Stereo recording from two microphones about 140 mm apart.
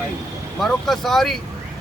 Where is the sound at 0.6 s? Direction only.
Centre (ahead or behind).